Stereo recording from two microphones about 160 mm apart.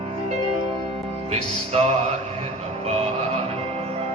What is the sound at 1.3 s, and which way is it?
Speech, 45° right (ahead or behind).